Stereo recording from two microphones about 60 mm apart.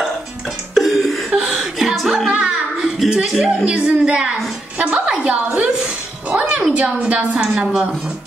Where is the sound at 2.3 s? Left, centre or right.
Centre.